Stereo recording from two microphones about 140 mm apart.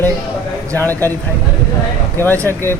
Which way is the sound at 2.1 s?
15° left (ahead or behind).